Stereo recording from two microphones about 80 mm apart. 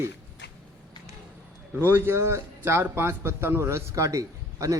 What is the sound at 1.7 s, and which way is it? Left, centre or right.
A man's voice, right.